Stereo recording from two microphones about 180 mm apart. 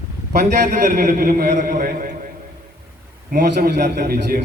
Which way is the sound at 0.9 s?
50° right (ahead or behind).